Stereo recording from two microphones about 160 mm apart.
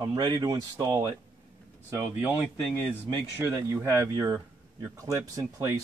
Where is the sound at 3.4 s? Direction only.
20° right (ahead or behind).